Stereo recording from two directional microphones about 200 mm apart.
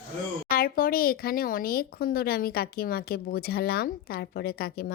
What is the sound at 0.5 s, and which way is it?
Speech, 45° left (ahead or behind).